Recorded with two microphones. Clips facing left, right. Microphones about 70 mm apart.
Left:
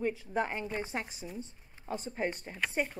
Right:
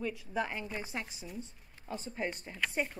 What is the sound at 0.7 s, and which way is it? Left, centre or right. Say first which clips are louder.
A woman's voice: left 3 dB; left.